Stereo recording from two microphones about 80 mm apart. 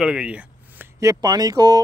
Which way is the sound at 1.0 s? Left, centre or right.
Right.